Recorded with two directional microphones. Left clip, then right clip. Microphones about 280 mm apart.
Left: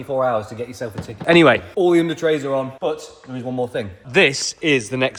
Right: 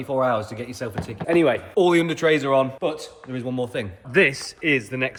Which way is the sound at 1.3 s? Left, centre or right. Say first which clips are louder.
Left 7 dB; left.